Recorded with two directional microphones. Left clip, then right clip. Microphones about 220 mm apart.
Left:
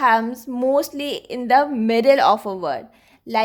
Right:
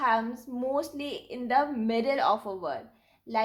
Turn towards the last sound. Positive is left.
turn(degrees=50)  # may be behind; listen again after turning